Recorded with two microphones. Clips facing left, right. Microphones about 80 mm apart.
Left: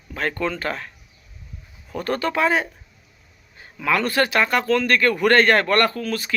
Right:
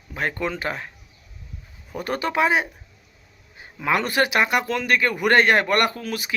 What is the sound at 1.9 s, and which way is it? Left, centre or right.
Speech, centre.